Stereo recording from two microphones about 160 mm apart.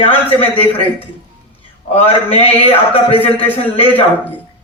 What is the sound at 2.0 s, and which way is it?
A man's voice, 35° left (ahead or behind).